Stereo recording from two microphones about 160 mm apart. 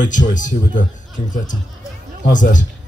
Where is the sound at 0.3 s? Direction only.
55° left (ahead or behind).